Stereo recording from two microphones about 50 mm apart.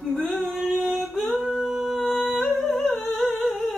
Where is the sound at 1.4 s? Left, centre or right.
Centre.